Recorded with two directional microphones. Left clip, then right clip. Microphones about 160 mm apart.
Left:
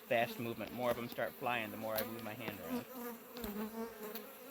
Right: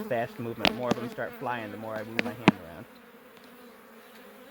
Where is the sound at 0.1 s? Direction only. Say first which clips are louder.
Right 3 dB; 55° right (ahead or behind).